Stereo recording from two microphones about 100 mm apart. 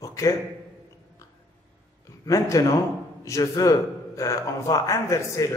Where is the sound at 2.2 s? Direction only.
30° left (ahead or behind).